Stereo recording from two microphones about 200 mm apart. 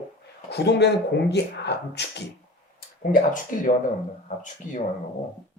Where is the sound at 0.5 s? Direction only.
55° left (ahead or behind).